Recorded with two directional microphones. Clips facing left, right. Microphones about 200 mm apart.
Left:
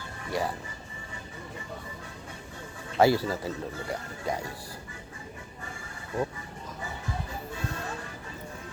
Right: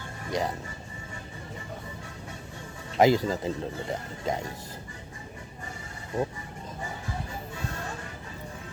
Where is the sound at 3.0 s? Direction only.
20° right (ahead or behind).